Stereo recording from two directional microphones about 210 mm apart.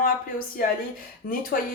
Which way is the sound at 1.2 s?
40° left (ahead or behind).